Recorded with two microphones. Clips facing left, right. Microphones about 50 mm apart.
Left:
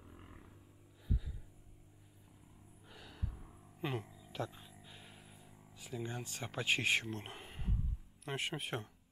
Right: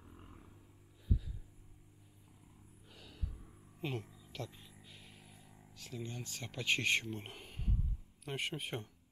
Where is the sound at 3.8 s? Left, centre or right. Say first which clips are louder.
Left 1 dB; centre.